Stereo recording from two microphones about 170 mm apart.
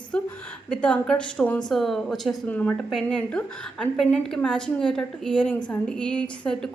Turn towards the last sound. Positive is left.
turn(degrees=5)  # may be behind; listen again after turning